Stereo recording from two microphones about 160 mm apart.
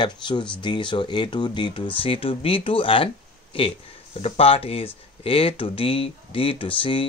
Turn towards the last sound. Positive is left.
turn(degrees=30)  # may be behind; listen again after turning